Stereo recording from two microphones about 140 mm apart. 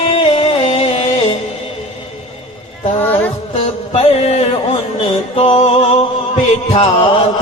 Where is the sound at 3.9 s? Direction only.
50° left (ahead or behind).